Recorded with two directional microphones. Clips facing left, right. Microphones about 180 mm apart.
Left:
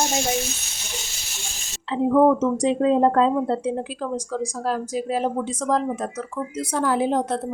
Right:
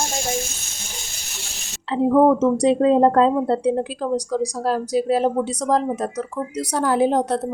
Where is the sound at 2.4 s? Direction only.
35° right (ahead or behind).